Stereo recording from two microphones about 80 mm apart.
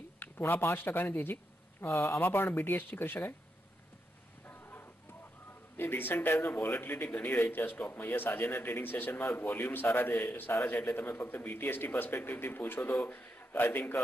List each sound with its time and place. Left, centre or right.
0.2 s speech: left
4.5 s music: left
5.8 s speech: left